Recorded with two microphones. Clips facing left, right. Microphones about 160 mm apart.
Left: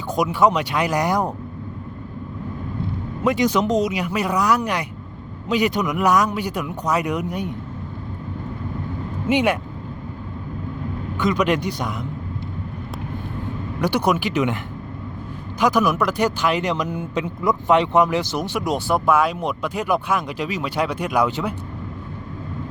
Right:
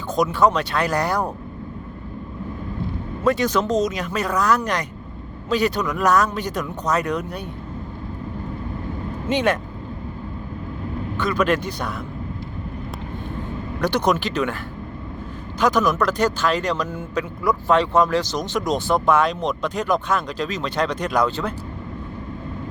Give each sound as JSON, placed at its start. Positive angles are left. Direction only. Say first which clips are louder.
{"t": 0.1, "sound": "speech", "louder": "even", "side_deg": 15}
{"t": 3.2, "sound": "speech", "louder": "left 1 dB", "side_deg": 15}
{"t": 9.3, "sound": "speech", "louder": "left 1 dB", "side_deg": 15}
{"t": 11.2, "sound": "speech", "louder": "left 1 dB", "side_deg": 15}
{"t": 13.8, "sound": "speech", "louder": "even", "side_deg": 10}